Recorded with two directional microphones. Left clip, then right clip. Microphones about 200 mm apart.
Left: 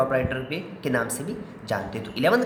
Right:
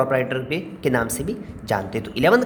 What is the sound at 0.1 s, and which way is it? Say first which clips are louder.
A woman's voice: right 4 dB; 30° right (ahead or behind).